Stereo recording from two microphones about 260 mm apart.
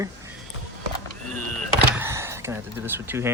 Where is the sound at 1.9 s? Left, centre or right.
Centre.